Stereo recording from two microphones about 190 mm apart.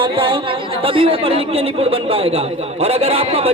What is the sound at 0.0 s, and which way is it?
A man's voice, 25° right (ahead or behind).